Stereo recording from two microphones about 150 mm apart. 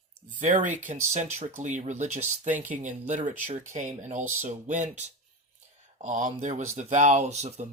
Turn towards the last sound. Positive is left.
turn(degrees=-45)  # may be behind; listen again after turning